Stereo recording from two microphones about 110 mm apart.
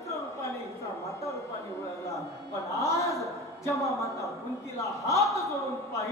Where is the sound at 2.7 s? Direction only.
30° left (ahead or behind).